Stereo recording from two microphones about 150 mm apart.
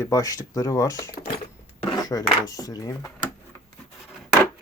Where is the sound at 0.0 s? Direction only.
20° left (ahead or behind).